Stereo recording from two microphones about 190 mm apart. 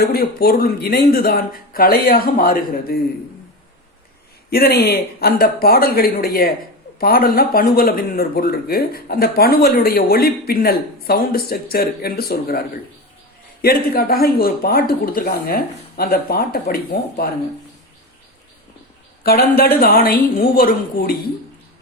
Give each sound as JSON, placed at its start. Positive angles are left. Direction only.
{"t": 0.0, "sound": "speech", "side_deg": 55}
{"t": 4.5, "sound": "speech", "side_deg": 55}
{"t": 19.2, "sound": "a man's voice", "side_deg": 55}